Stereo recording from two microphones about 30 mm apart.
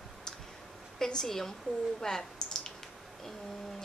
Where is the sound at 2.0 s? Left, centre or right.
Centre.